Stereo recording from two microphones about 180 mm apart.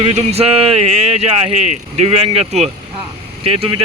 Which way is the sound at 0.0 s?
35° right (ahead or behind).